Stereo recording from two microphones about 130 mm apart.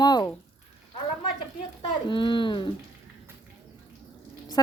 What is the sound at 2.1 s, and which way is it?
Speech, 40° left (ahead or behind).